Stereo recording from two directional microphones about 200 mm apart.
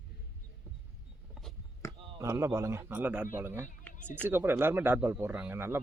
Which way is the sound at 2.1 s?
15° right (ahead or behind).